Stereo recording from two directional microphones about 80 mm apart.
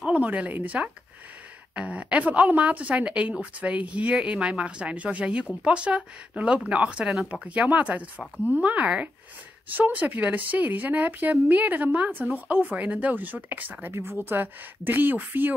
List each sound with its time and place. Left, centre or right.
0.0 s a woman's voice: centre